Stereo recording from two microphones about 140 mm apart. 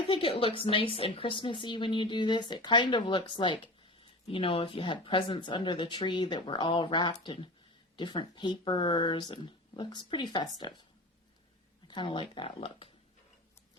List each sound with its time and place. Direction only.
0.1 s a woman's voice: 40° left (ahead or behind)
11.9 s a woman's voice: 35° left (ahead or behind)